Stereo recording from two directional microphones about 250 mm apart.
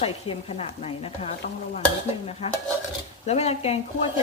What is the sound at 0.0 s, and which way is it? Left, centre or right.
Speech, left.